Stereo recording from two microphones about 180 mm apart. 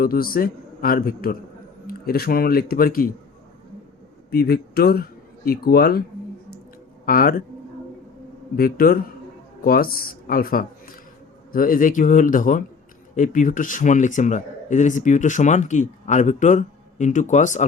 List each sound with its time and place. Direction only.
0.0 s a man's voice: 55° left (ahead or behind)
4.3 s speech: 60° left (ahead or behind)
7.0 s speech: 55° left (ahead or behind)
8.5 s a man's voice: 55° left (ahead or behind)